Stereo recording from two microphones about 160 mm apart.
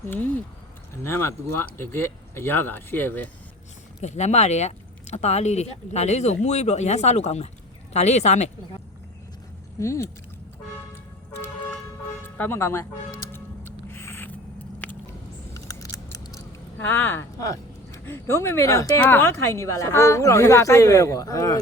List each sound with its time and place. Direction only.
1.0 s speech: 15° left (ahead or behind)
4.0 s speech: 45° left (ahead or behind)
9.8 s speech: 20° left (ahead or behind)
12.2 s speech: 15° left (ahead or behind)
13.3 s music: 15° left (ahead or behind)
14.8 s a sound: 10° left (ahead or behind)
15.5 s speech: 20° left (ahead or behind)